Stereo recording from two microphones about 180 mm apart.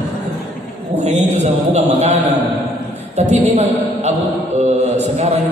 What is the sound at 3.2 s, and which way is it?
Speech, 35° right (ahead or behind).